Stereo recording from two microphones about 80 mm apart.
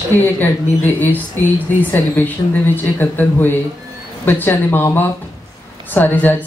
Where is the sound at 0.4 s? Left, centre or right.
Left.